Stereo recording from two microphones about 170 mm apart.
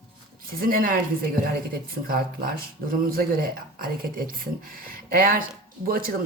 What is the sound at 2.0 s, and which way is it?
Speech, 60° right (ahead or behind).